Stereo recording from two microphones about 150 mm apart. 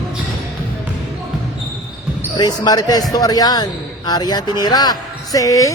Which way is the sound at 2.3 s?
25° left (ahead or behind).